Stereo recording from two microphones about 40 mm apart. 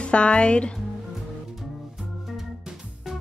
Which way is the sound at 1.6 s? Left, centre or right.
Centre.